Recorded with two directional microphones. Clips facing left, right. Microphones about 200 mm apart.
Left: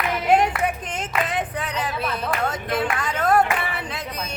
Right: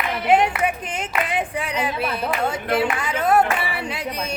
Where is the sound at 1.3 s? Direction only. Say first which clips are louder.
Right 2 dB; 10° right (ahead or behind).